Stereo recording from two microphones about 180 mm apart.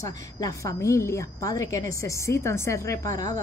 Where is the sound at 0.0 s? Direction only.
20° left (ahead or behind).